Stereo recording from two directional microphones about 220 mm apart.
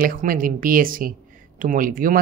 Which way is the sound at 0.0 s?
40° right (ahead or behind).